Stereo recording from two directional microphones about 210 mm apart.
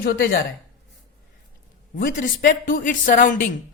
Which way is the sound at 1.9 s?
40° left (ahead or behind).